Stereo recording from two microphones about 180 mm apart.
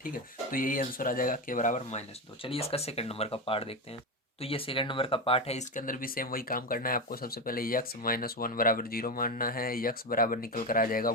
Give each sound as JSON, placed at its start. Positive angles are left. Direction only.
{"t": 0.0, "sound": "speech", "side_deg": 50}